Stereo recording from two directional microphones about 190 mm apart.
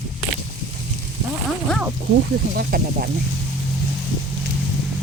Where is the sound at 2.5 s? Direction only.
50° right (ahead or behind).